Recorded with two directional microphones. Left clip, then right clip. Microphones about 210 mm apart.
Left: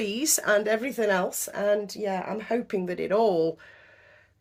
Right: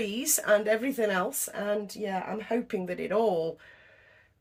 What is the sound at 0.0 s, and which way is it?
Speech, 50° left (ahead or behind).